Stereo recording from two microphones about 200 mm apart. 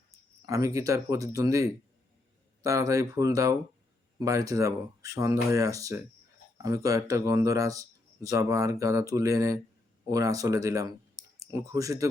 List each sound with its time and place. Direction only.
0.4 s speech: 15° right (ahead or behind)